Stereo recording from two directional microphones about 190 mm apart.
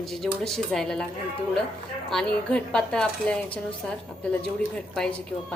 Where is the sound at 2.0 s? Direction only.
5° left (ahead or behind).